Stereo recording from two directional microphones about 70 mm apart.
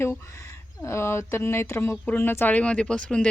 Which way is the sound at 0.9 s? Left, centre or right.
Left.